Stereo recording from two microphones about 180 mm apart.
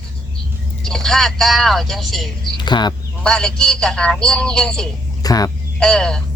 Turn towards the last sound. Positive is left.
turn(degrees=5)  # may be behind; listen again after turning